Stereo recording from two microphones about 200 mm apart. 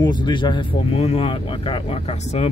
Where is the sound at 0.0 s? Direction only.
20° left (ahead or behind).